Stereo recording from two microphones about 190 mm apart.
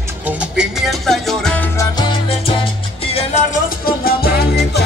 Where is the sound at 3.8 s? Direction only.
55° left (ahead or behind).